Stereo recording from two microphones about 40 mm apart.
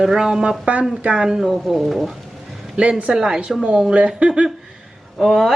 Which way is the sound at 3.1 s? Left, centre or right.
Right.